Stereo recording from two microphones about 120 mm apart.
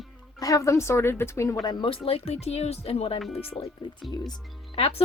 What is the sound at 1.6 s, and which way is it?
Speech, 40° left (ahead or behind).